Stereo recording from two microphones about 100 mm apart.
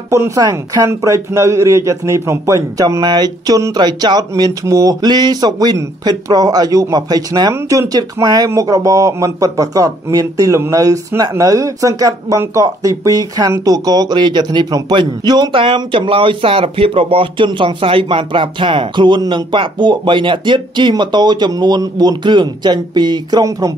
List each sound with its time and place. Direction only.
0.1 s speech: 30° right (ahead or behind)
0.4 s speech: 40° right (ahead or behind)
0.8 s speech: 30° right (ahead or behind)
3.0 s speech: 45° right (ahead or behind)
4.3 s speech: 30° right (ahead or behind)
7.5 s speech: 25° right (ahead or behind)
7.9 s speech: 40° right (ahead or behind)
15.5 s speech: 60° right (ahead or behind); by 23.7 s 40° right (ahead or behind)